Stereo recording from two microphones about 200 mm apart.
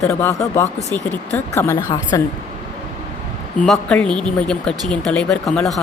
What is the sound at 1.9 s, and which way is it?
Speech, 20° left (ahead or behind).